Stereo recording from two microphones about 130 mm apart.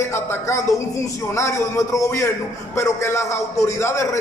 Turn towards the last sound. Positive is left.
turn(degrees=20)  # may be behind; listen again after turning